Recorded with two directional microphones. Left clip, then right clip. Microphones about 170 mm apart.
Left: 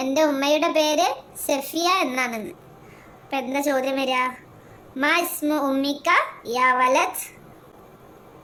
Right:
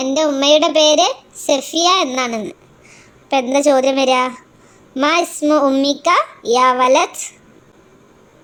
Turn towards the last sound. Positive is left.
turn(degrees=-20)  # may be behind; listen again after turning